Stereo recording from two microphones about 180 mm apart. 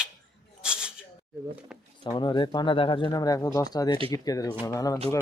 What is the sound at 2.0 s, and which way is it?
Speech, 25° left (ahead or behind).